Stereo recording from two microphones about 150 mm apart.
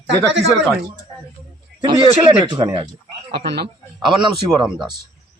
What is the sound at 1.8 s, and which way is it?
A man's voice, 35° right (ahead or behind).